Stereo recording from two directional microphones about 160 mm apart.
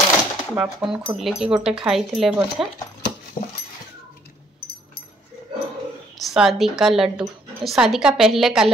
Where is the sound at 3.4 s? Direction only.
45° left (ahead or behind).